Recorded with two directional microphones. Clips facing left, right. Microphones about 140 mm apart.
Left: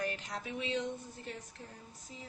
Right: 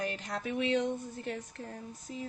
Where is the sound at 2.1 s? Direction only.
65° right (ahead or behind).